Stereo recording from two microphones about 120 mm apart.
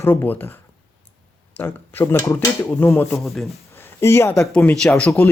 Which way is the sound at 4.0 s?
20° left (ahead or behind).